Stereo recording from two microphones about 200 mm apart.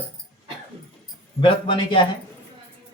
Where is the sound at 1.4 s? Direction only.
25° left (ahead or behind).